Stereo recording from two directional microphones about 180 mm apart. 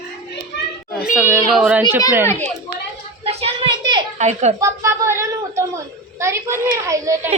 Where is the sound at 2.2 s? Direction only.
15° left (ahead or behind).